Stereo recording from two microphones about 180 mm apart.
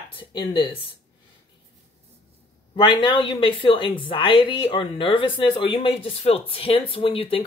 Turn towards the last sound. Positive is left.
turn(degrees=30)  # may be behind; listen again after turning